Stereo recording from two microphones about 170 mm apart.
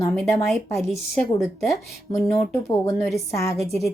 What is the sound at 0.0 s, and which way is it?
Speech, 15° left (ahead or behind).